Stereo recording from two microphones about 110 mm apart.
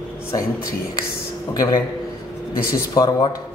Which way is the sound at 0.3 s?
30° left (ahead or behind).